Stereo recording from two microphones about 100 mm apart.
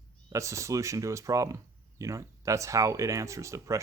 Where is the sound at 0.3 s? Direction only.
30° right (ahead or behind).